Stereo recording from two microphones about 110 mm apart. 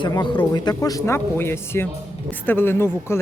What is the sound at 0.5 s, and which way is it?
Speech, 35° left (ahead or behind).